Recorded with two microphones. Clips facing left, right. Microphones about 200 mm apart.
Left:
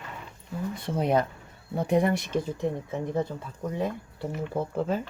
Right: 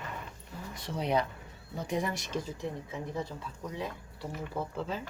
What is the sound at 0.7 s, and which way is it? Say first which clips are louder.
Speech: left 5 dB; 55° left (ahead or behind).